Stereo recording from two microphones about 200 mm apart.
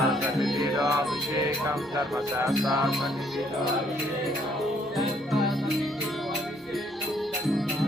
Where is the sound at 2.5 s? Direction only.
Centre (ahead or behind).